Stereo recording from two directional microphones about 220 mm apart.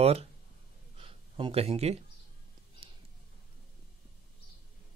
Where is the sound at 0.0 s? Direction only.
25° right (ahead or behind).